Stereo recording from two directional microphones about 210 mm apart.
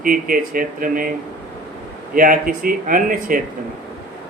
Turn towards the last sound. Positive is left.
turn(degrees=-40)  # may be behind; listen again after turning